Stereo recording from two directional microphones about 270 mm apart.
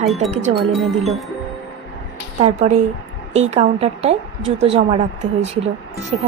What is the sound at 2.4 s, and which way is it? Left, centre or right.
A woman's voice, right.